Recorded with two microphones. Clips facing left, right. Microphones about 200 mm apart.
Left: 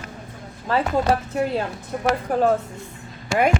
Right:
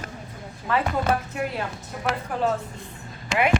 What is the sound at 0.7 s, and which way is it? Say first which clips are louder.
A woman's voice: left 3 dB; 30° left (ahead or behind).